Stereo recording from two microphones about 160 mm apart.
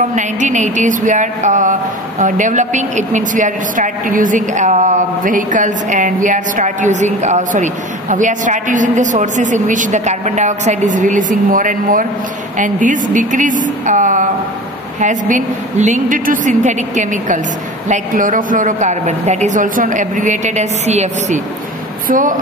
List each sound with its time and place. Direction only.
0.1 s speech: 50° right (ahead or behind)
22.0 s speech: 55° right (ahead or behind)